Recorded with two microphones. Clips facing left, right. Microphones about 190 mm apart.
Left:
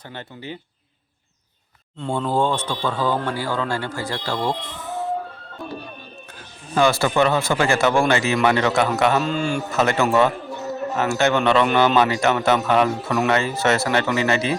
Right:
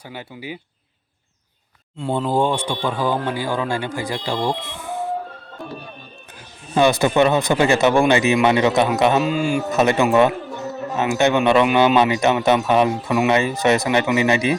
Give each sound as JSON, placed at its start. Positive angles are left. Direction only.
{"t": 0.1, "sound": "a man's voice", "side_deg": -10}
{"t": 2.1, "sound": "a man's voice", "side_deg": -15}
{"t": 6.7, "sound": "speech", "side_deg": -20}
{"t": 9.2, "sound": "a man's voice", "side_deg": -5}